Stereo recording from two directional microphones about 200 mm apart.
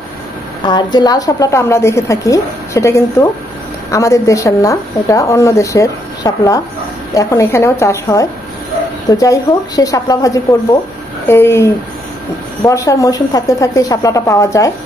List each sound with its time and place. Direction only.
0.7 s speech: 20° left (ahead or behind)